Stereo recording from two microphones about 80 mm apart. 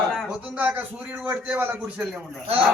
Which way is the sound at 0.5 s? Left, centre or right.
Centre.